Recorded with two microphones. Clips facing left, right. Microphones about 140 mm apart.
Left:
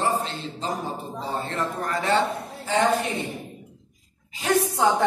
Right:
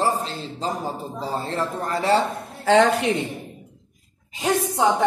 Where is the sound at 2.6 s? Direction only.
85° right.